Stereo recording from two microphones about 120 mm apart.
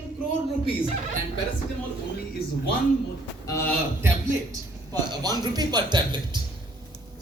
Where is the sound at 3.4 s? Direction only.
25° left (ahead or behind).